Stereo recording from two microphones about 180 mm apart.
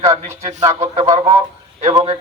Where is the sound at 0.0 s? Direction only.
35° right (ahead or behind).